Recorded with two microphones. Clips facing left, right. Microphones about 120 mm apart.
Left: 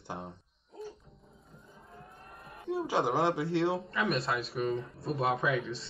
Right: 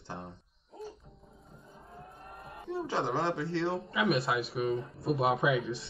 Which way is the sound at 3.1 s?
15° left (ahead or behind).